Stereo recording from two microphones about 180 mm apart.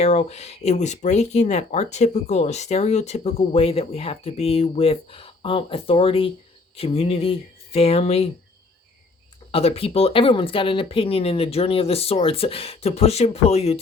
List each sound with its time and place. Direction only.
0.0 s speech: 35° left (ahead or behind)
9.5 s speech: 35° left (ahead or behind)